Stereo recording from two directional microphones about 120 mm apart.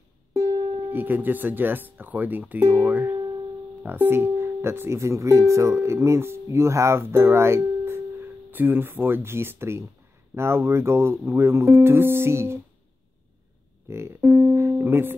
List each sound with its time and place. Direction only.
0.9 s speech: 15° right (ahead or behind)
13.8 s music: 20° right (ahead or behind)